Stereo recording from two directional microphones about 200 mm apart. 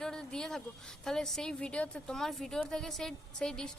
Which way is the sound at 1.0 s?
Centre (ahead or behind).